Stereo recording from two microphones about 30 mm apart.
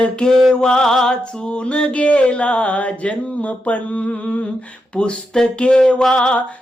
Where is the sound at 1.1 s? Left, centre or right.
Left.